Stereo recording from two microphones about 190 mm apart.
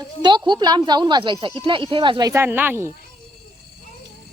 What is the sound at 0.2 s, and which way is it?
Speech, 25° right (ahead or behind).